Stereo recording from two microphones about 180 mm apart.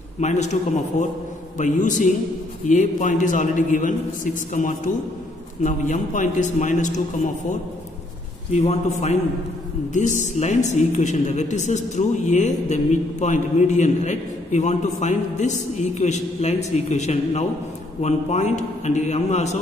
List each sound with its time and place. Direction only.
0.2 s a man's voice: 40° left (ahead or behind)
8.5 s speech: 40° left (ahead or behind)